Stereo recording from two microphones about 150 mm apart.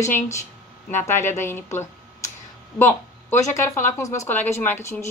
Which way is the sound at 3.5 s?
20° left (ahead or behind).